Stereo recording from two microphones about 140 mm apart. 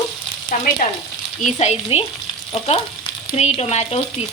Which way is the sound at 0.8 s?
65° left (ahead or behind).